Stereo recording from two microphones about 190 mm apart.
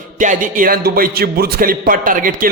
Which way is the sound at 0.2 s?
45° right (ahead or behind).